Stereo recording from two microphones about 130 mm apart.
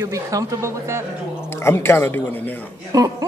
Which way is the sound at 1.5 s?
20° left (ahead or behind).